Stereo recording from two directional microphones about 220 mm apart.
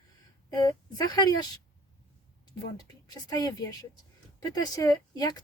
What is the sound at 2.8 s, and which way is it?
A woman's voice, 15° left (ahead or behind).